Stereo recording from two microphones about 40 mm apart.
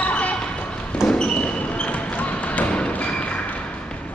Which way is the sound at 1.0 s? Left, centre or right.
Left.